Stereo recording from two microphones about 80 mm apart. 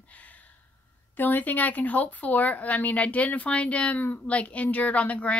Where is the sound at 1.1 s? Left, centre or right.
Left.